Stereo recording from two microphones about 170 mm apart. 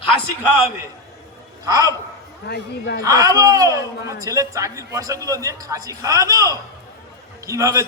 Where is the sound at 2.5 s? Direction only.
80° left.